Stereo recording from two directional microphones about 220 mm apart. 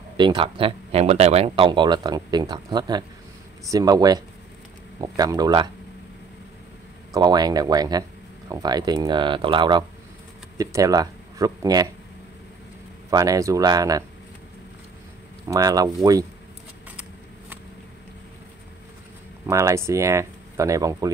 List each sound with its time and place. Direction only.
0.2 s speech: 20° right (ahead or behind)
7.2 s speech: 20° right (ahead or behind)
13.1 s speech: 15° right (ahead or behind)
15.4 s speech: 15° right (ahead or behind)
19.4 s speech: 15° right (ahead or behind)